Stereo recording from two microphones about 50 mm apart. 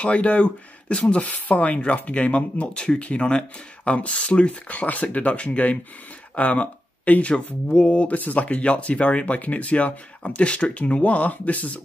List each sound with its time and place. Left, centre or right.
0.0 s speech: left